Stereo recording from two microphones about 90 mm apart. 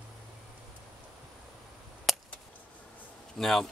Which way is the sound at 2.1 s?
Centre (ahead or behind).